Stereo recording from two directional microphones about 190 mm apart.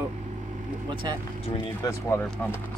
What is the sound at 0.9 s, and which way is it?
Speech, 25° right (ahead or behind).